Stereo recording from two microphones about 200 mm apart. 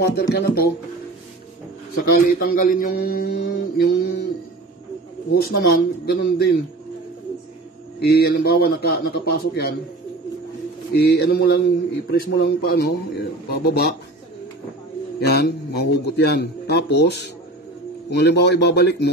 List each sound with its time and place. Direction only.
0.0 s speech: 55° left (ahead or behind)
2.1 s speech: 50° left (ahead or behind)
5.3 s speech: 50° left (ahead or behind)
8.0 s speech: 50° left (ahead or behind)
11.1 s a man's voice: 55° left (ahead or behind)
15.1 s a man's voice: 55° left (ahead or behind)